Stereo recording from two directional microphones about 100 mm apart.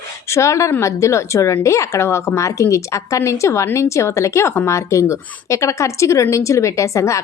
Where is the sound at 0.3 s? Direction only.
30° left (ahead or behind).